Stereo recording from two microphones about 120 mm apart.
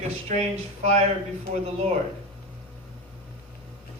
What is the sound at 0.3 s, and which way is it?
Speech, 65° right (ahead or behind).